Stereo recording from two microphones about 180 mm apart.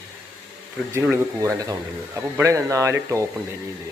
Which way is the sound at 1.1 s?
20° right (ahead or behind).